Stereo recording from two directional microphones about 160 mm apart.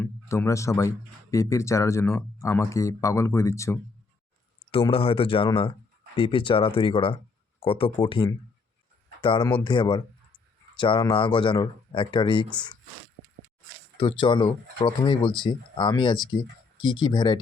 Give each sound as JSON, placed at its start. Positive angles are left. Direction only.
{"t": 0.0, "sound": "speech", "side_deg": 15}
{"t": 4.7, "sound": "speech", "side_deg": 35}
{"t": 14.0, "sound": "speech", "side_deg": 30}